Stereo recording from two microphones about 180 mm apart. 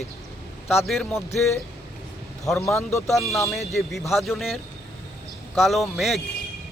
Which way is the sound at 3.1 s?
Centre (ahead or behind).